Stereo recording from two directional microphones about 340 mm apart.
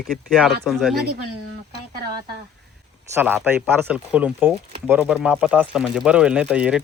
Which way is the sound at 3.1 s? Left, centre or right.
Centre.